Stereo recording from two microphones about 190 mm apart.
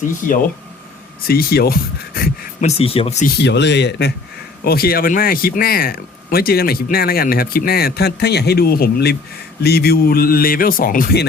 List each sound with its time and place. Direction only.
0.2 s speech: 45° left (ahead or behind)
1.3 s a sound: 55° left (ahead or behind)
2.6 s speech: 30° left (ahead or behind)
3.2 s speech: 60° left (ahead or behind)
4.6 s speech: 55° left (ahead or behind)